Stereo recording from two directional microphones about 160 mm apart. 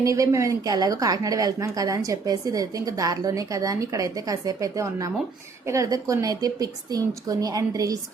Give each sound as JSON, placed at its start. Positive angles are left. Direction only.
{"t": 0.0, "sound": "a woman's voice", "side_deg": -20}